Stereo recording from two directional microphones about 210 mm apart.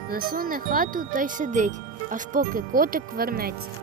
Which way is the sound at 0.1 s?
45° right (ahead or behind).